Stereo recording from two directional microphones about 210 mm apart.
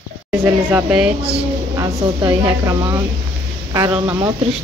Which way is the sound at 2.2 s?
20° right (ahead or behind).